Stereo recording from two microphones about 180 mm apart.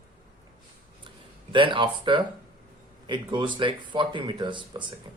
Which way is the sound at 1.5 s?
25° right (ahead or behind).